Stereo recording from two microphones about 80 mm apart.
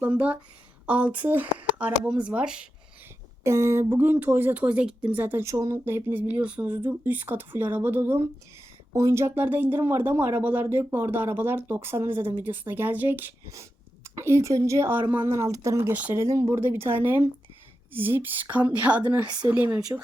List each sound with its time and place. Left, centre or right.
0.0 s speech: centre
3.4 s speech: right
5.5 s speech: right
5.7 s speech: right
6.7 s speech: right
8.9 s speech: right
13.5 s speech: right
15.9 s speech: right
16.1 s speech: right
16.6 s speech: right
19.2 s speech: right
19.5 s speech: right